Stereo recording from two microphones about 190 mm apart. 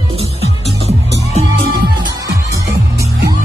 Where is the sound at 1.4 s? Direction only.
30° right (ahead or behind).